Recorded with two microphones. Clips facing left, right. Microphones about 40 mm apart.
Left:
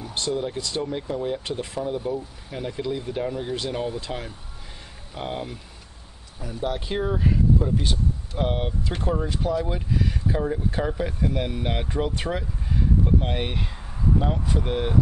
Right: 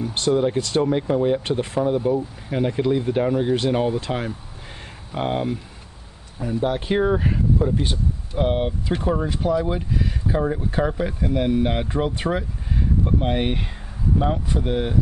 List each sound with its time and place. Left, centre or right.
0.3 s speech: right
0.6 s speech: right
0.9 s speech: right
5.1 s speech: right
7.8 s speech: right
8.4 s speech: centre